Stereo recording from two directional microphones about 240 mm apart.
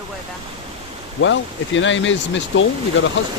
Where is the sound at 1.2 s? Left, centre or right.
Left.